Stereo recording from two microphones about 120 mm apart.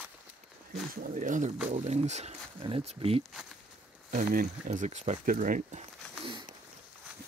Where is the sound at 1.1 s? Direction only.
90° right.